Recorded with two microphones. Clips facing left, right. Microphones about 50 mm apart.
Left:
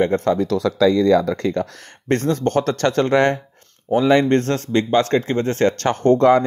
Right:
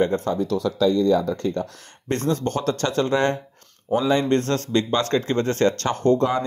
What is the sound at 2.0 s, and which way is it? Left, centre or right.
Speech, left.